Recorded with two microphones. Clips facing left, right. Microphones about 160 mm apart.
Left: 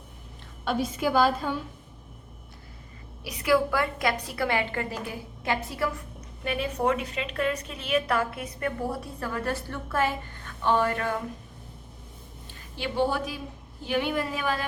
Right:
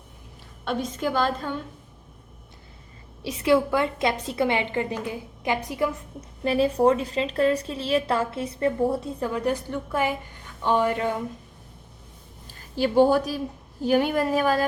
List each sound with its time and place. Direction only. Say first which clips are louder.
0.6 s a woman's voice: even; 5° left (ahead or behind)
3.2 s a woman's voice: right 3 dB; 25° right (ahead or behind)
6.4 s a woman's voice: right 7 dB; 30° right (ahead or behind)
12.7 s speech: right 8 dB; 40° right (ahead or behind)